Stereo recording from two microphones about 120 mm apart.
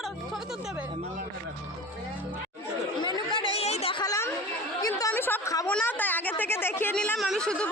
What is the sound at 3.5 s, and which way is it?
Chatter, 60° left (ahead or behind).